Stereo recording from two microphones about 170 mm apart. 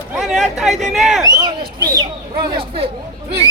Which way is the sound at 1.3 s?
25° right (ahead or behind).